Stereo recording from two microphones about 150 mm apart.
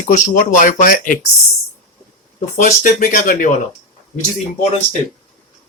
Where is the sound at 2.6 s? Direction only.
60° left (ahead or behind).